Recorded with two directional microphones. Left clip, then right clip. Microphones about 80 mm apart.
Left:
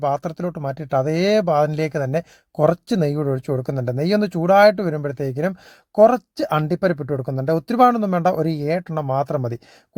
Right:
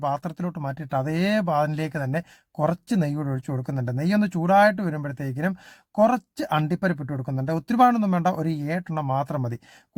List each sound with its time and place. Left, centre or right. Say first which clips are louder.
0.0 s speech: left 5 dB; left